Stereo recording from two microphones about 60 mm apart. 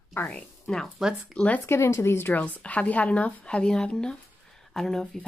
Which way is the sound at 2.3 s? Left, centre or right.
Left.